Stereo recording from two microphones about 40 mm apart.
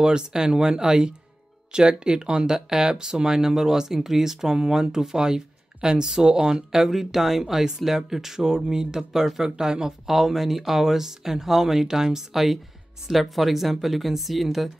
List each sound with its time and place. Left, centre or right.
0.0 s speech: centre
10.0 s speech: centre